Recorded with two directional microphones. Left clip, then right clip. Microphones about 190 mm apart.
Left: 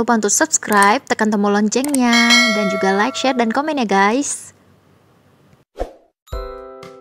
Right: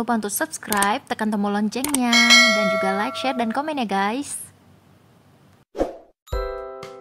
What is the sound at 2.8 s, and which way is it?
Speech, 25° left (ahead or behind).